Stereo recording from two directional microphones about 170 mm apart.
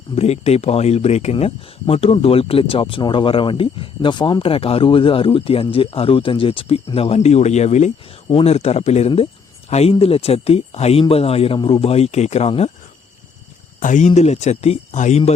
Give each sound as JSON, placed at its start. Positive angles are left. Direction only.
{"t": 0.2, "sound": "speech", "side_deg": 40}
{"t": 13.7, "sound": "speech", "side_deg": 50}